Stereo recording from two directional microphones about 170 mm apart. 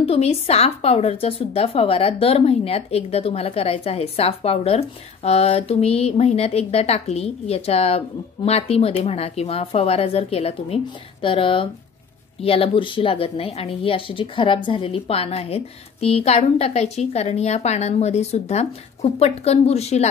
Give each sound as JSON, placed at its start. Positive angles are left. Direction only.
{"t": 0.0, "sound": "speech", "side_deg": 35}